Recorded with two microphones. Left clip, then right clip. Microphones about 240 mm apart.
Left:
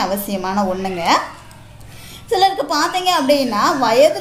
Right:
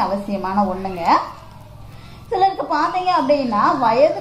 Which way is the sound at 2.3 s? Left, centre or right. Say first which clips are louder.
Left 2 dB; left.